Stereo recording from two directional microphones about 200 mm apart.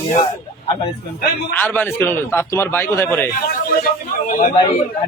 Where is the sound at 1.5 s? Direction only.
10° left (ahead or behind).